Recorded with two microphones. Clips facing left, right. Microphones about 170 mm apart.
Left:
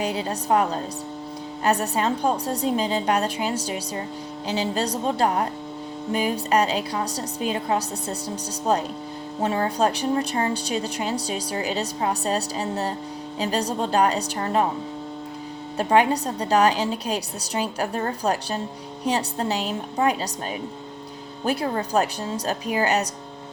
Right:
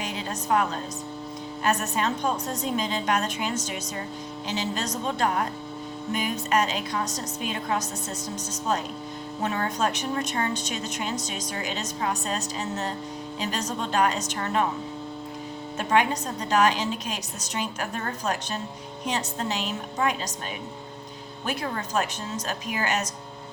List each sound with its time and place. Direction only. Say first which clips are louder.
0.0 s a woman's voice: left 6 dB; 35° left (ahead or behind)
9.4 s a woman's voice: left 5 dB; 30° left (ahead or behind)
15.8 s a woman's voice: left 4 dB; 35° left (ahead or behind)
21.4 s a woman's voice: left 6 dB; 35° left (ahead or behind)